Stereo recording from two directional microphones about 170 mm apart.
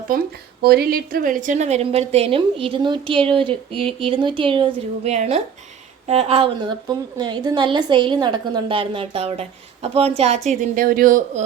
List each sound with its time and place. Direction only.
0.1 s a woman's voice: 60° right (ahead or behind); by 4.7 s 30° right (ahead or behind)
5.0 s a woman's voice: 40° right (ahead or behind)